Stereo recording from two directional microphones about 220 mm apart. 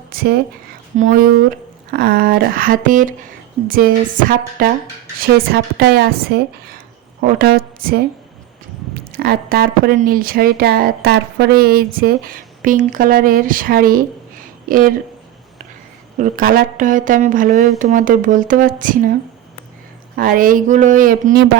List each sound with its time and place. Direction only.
0.1 s a sound: 40° right (ahead or behind)
0.9 s a woman's voice: 35° right (ahead or behind)
9.1 s a woman's voice: 45° right (ahead or behind)
16.1 s a woman's voice: 40° right (ahead or behind)
20.1 s a woman's voice: 40° right (ahead or behind)